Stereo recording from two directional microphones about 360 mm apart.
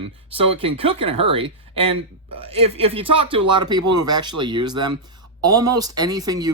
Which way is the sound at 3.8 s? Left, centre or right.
Right.